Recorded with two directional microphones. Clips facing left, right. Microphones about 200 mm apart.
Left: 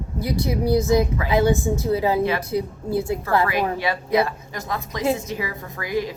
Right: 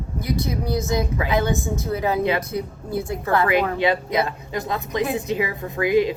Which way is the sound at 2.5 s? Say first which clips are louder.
Left 3 dB; 20° left (ahead or behind).